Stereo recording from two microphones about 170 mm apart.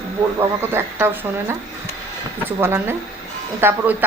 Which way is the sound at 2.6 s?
15° right (ahead or behind).